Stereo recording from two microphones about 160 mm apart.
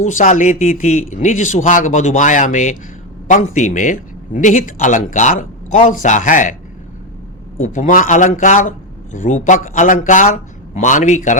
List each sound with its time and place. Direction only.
0.0 s a man's voice: 50° left (ahead or behind)
7.6 s a man's voice: 55° left (ahead or behind)